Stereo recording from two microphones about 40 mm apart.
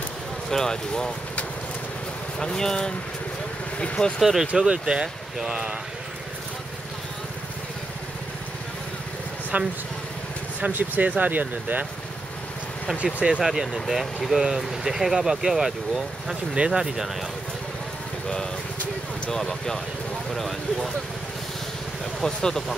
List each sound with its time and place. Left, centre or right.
0.5 s speech: centre
2.3 s speech: centre
4.2 s speech: centre
4.6 s speech: right
5.0 s speech: centre
9.5 s speech: right
10.7 s speech: right
13.0 s speech: right
13.4 s speech: centre
16.5 s speech: right
19.3 s speech: centre
22.2 s speech: centre